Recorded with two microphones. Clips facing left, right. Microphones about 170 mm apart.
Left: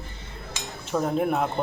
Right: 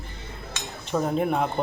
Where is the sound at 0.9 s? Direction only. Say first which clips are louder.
Even; centre (ahead or behind).